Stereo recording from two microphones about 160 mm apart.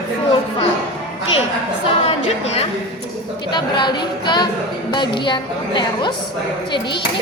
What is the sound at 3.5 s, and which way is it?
A woman's voice, 30° left (ahead or behind).